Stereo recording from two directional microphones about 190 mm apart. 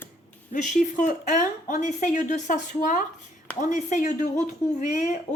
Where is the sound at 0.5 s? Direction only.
40° left (ahead or behind).